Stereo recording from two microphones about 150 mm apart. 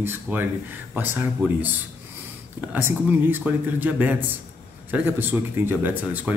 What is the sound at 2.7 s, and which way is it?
Speech, 15° right (ahead or behind).